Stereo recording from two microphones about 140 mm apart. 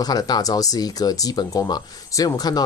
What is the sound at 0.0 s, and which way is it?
Speech, 30° left (ahead or behind).